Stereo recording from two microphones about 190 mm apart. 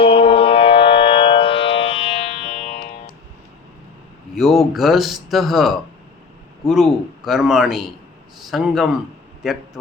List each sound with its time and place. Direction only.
0.0 s music: 30° left (ahead or behind)
4.4 s speech: centre (ahead or behind)
7.3 s speech: centre (ahead or behind)